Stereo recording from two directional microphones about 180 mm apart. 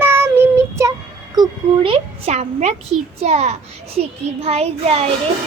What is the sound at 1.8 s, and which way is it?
Speech, 30° right (ahead or behind).